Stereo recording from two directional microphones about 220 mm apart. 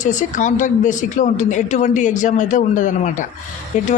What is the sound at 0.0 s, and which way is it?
A woman's voice, 35° left (ahead or behind).